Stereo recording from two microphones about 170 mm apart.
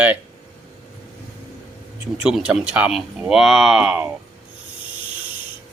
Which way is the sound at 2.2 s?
5° right (ahead or behind).